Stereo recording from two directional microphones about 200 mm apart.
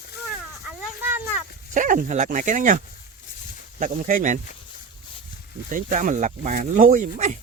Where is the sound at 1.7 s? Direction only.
40° right (ahead or behind).